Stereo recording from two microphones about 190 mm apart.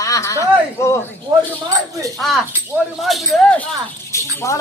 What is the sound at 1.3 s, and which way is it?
Speech, 20° right (ahead or behind).